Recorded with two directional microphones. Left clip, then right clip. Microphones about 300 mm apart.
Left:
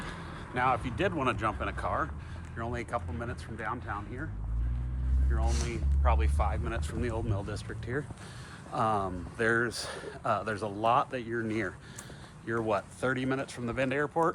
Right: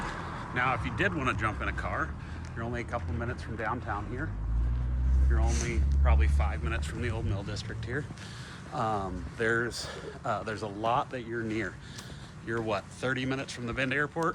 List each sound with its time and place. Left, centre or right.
0.5 s speech: centre
5.3 s speech: centre